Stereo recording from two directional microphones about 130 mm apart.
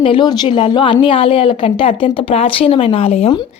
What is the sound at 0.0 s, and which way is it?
A woman's voice, 40° left (ahead or behind).